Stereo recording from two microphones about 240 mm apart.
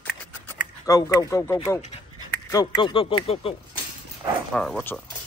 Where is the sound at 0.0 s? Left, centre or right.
Centre.